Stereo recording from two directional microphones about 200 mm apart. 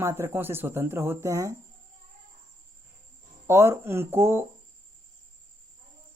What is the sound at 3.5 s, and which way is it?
Speech, 10° right (ahead or behind).